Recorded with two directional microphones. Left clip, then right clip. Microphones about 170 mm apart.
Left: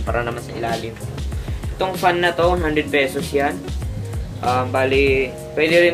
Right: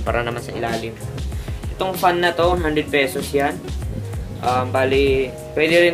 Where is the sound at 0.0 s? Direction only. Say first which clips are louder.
Right 1 dB; 50° right (ahead or behind).